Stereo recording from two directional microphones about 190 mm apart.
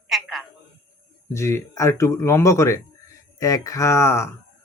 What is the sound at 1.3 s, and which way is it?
A man's voice, 15° left (ahead or behind).